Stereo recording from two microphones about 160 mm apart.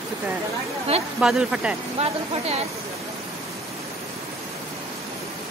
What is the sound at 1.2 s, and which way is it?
Speech, 5° right (ahead or behind).